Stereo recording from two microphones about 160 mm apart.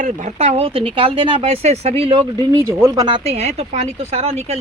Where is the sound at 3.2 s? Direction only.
40° right (ahead or behind).